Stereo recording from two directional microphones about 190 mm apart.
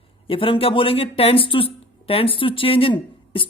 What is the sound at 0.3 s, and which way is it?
A man's voice, 30° left (ahead or behind).